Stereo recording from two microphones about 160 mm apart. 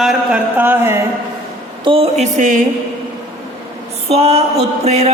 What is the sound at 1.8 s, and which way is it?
Speech, 35° right (ahead or behind).